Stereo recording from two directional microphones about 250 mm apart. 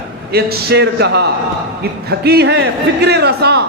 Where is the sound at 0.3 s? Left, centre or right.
Right.